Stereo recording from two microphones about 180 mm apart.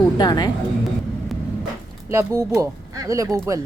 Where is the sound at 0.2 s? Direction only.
25° left (ahead or behind).